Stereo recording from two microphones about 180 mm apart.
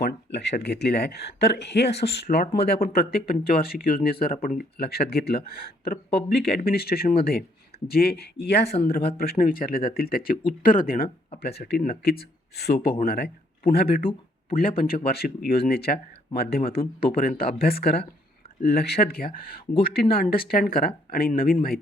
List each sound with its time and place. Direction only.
0.3 s speech: 70° left (ahead or behind); by 21.8 s 55° left (ahead or behind)